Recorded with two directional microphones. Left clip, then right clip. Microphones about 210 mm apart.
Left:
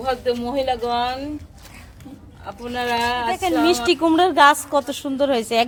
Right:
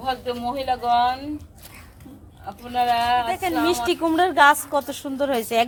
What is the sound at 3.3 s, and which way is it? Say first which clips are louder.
A woman's voice: left 3 dB; 15° left (ahead or behind).